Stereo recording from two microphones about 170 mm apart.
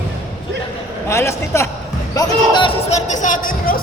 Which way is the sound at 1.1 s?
15° left (ahead or behind).